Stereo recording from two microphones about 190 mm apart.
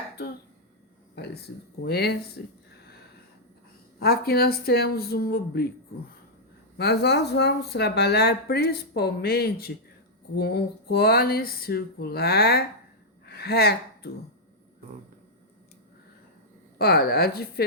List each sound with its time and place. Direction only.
1.1 s a sound: 60° left (ahead or behind)
1.8 s speech: 60° left (ahead or behind)
4.0 s speech: 55° left (ahead or behind)
6.7 s speech: 60° left (ahead or behind)
16.7 s speech: 55° left (ahead or behind)